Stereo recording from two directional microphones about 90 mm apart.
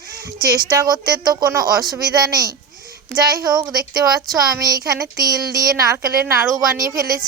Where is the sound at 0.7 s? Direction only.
45° right (ahead or behind).